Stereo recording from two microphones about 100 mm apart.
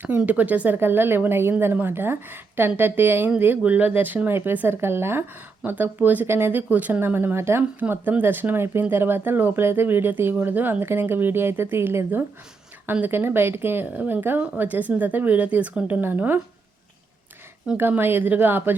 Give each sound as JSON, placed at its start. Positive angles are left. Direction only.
{"t": 0.2, "sound": "speech", "side_deg": -15}
{"t": 17.7, "sound": "speech", "side_deg": -20}